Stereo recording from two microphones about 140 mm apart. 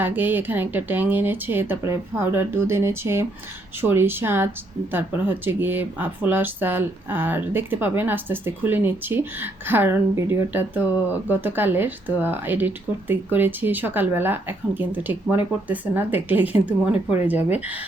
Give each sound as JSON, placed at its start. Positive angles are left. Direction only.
{"t": 0.0, "sound": "speech", "side_deg": -15}